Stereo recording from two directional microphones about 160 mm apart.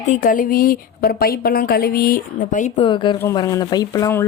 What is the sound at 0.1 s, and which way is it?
A woman's voice, 55° left (ahead or behind).